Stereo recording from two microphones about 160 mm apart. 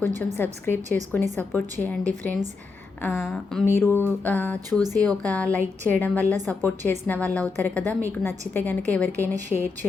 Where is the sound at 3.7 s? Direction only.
15° left (ahead or behind).